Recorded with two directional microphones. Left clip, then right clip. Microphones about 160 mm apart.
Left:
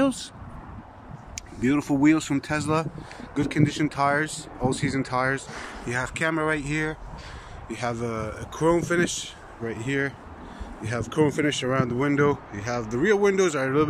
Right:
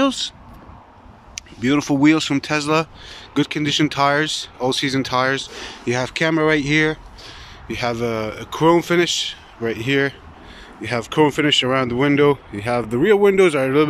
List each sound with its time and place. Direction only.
0.0 s speech: 5° left (ahead or behind)
1.3 s speech: 5° left (ahead or behind)
5.9 s speech: 15° right (ahead or behind)
7.6 s speech: centre (ahead or behind)